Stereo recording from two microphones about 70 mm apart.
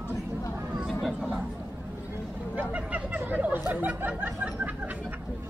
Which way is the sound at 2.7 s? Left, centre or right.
Right.